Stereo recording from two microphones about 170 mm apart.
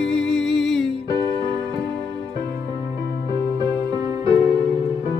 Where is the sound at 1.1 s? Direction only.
25° right (ahead or behind).